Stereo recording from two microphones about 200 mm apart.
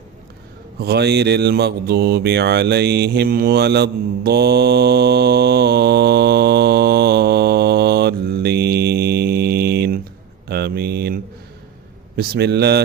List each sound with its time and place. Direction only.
0.8 s speech: 55° right (ahead or behind)
10.5 s mantra: 55° right (ahead or behind)
12.1 s a man's voice: 55° right (ahead or behind)